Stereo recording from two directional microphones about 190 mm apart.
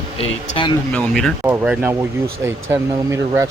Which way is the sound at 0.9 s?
5° left (ahead or behind).